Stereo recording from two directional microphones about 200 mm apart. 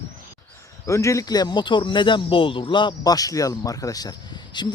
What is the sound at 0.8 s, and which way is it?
Speech, 15° left (ahead or behind).